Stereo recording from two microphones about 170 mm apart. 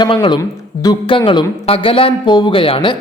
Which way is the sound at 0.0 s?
25° left (ahead or behind).